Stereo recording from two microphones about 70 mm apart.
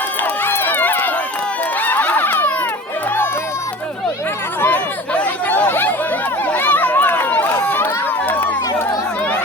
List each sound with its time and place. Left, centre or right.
0.2 s run: left
4.6 s chatter: left